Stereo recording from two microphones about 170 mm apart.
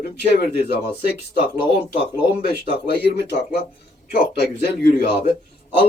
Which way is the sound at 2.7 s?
75° left (ahead or behind).